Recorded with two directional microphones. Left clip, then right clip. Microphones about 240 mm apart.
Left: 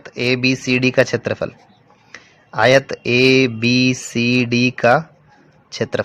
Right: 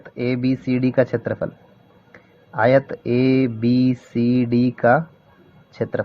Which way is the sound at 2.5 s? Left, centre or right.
Left.